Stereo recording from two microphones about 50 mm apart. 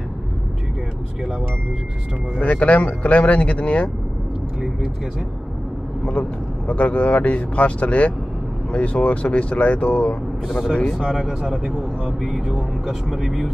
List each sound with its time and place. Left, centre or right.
2.3 s speech: left
6.7 s speech: left
11.0 s speech: centre